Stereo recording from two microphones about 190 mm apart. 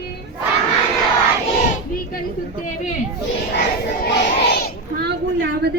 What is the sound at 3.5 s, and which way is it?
Crowd, 60° left (ahead or behind).